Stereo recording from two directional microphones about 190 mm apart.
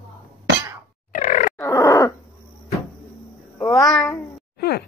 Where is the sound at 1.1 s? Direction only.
40° left (ahead or behind).